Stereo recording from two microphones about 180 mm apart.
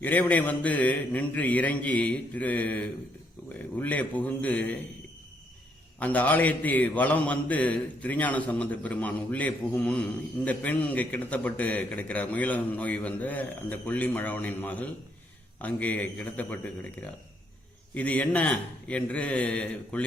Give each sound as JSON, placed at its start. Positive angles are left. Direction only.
{"t": 0.0, "sound": "a man's voice", "side_deg": 10}
{"t": 6.0, "sound": "a man's voice", "side_deg": 10}